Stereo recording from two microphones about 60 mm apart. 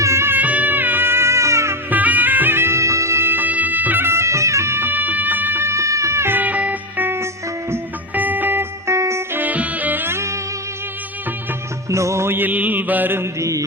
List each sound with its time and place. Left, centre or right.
0.0 s music: right
0.3 s music: right
1.9 s music: right
3.3 s music: right
4.1 s music: right
6.2 s music: right
8.9 s music: right
9.4 s music: right
11.9 s music: right
12.3 s mantra: right
13.4 s mantra: right